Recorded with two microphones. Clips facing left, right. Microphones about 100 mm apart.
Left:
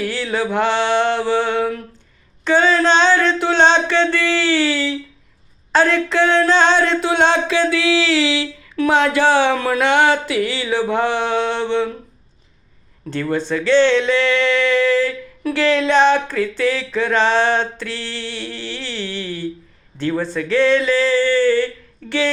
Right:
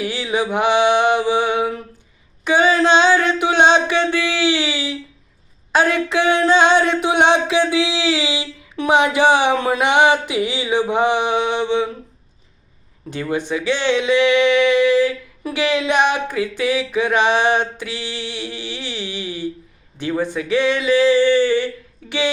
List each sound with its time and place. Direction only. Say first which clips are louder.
0.0 s mantra: even; 15° right (ahead or behind)
2.4 s speech: even; 10° right (ahead or behind)
13.1 s speech: left 2 dB; 15° right (ahead or behind)